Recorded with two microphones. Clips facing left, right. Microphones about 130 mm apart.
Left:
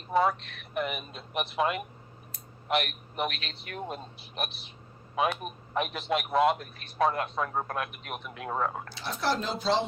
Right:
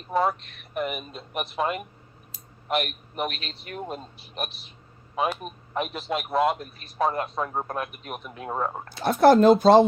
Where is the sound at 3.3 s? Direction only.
35° right (ahead or behind).